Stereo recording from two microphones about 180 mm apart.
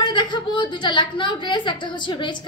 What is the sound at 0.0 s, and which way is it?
A woman's voice, 25° left (ahead or behind).